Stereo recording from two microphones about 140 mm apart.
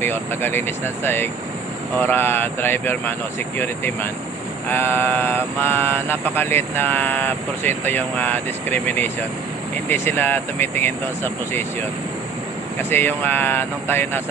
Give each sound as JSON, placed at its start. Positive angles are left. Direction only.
{"t": 0.0, "sound": "speech", "side_deg": 15}
{"t": 12.9, "sound": "speech", "side_deg": 15}